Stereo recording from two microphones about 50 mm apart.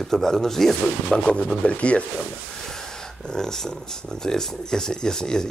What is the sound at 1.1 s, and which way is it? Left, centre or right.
Speech, centre.